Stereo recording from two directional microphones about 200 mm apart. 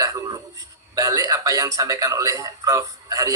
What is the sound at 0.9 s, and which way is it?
Speech, 15° right (ahead or behind).